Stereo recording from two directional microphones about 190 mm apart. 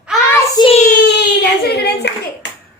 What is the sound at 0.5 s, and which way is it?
Child singing, 25° left (ahead or behind).